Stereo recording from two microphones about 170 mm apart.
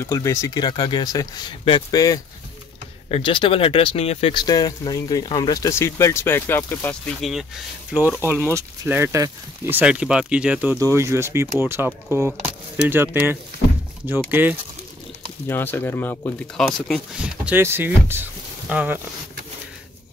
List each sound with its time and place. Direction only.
0.0 s speech: 15° left (ahead or behind)
1.6 s speech: 35° left (ahead or behind)
1.9 s speech: 20° left (ahead or behind)
7.2 s speech: centre (ahead or behind)
8.2 s speech: 15° right (ahead or behind)
15.4 s speech: 10° left (ahead or behind)
16.5 s speech: 5° left (ahead or behind)
17.2 s speech: 10° right (ahead or behind)